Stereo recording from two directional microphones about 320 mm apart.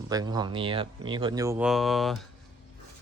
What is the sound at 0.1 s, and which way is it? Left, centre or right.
Speech, centre.